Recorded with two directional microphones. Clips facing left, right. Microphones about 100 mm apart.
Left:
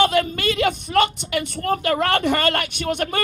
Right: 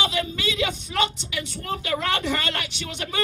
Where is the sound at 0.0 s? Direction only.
50° left (ahead or behind).